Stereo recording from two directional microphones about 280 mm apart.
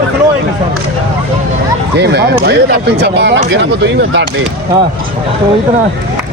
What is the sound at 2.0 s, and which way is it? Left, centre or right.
Speech, right.